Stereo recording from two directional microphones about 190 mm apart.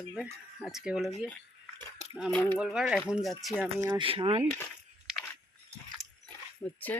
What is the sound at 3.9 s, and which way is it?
Speech, 25° right (ahead or behind).